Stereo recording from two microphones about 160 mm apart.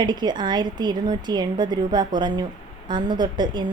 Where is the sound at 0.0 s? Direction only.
25° right (ahead or behind).